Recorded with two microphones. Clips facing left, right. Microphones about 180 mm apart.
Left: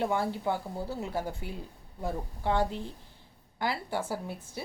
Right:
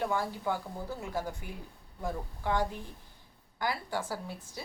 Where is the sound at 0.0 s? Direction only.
20° left (ahead or behind).